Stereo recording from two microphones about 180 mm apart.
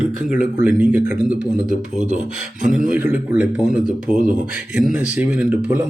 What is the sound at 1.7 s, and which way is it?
Speech, 40° right (ahead or behind).